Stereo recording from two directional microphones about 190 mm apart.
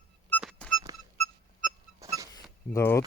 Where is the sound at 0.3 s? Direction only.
Centre (ahead or behind).